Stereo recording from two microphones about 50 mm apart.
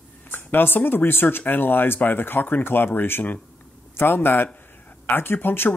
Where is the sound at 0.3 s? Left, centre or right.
Left.